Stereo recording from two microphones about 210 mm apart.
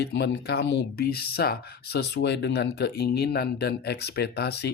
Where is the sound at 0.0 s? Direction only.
55° left (ahead or behind).